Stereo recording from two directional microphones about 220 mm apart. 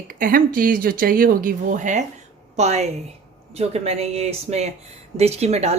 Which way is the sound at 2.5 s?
30° right (ahead or behind).